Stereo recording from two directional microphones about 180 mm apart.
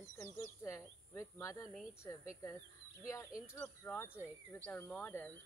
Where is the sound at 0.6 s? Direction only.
15° left (ahead or behind).